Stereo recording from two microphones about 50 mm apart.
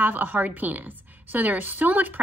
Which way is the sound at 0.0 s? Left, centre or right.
Right.